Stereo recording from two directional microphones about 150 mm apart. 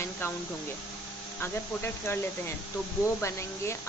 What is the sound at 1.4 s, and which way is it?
Speech, 15° left (ahead or behind).